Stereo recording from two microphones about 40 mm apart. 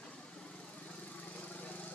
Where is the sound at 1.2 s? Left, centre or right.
Left.